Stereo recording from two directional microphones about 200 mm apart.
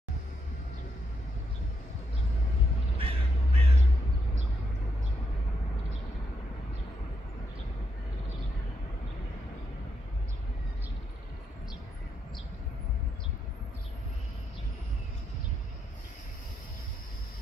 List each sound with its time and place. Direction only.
3.0 s crow: 30° right (ahead or behind)